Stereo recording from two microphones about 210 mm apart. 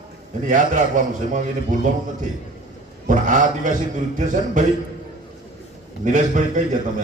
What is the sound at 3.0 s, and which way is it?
A man's voice, 40° right (ahead or behind).